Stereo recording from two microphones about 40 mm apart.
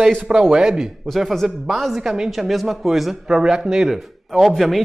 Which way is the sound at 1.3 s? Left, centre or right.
Centre.